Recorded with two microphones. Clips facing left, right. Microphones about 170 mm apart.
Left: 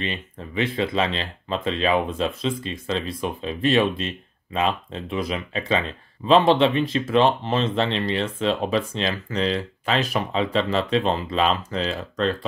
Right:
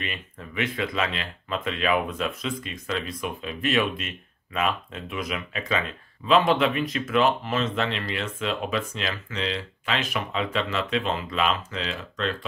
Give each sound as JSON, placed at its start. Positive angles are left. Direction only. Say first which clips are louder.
{"t": 0.0, "sound": "speech", "louder": "left 5 dB", "side_deg": 30}